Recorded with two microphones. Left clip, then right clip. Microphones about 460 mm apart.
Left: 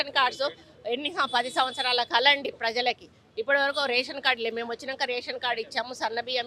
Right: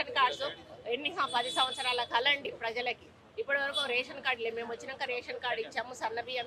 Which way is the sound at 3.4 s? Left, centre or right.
Left.